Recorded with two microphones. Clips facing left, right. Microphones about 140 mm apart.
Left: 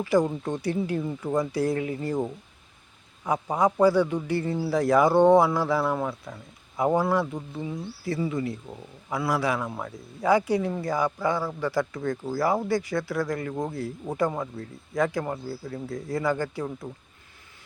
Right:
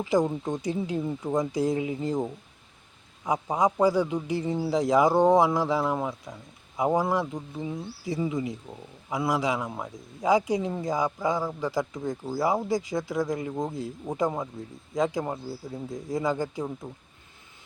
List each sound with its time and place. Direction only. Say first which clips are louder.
0.0 s a man's voice: left 1 dB; 20° right (ahead or behind)
3.2 s a man's voice: left 1 dB; 15° right (ahead or behind)